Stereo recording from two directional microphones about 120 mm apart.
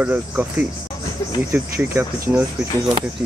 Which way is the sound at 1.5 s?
15° right (ahead or behind).